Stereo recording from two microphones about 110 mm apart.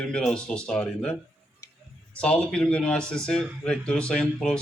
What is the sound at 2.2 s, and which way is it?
Speech, 10° left (ahead or behind).